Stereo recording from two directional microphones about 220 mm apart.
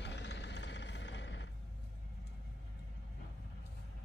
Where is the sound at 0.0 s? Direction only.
55° left (ahead or behind).